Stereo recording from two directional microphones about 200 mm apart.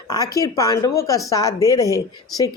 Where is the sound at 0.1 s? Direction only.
15° left (ahead or behind).